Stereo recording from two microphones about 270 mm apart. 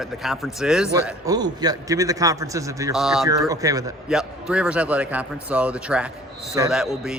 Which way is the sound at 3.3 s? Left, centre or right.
Centre.